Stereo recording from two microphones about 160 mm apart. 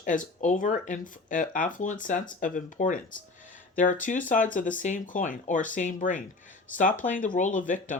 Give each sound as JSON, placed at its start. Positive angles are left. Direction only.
{"t": 0.0, "sound": "speech", "side_deg": 55}